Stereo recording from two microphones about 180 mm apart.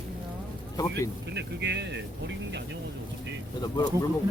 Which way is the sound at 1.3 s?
75° right (ahead or behind).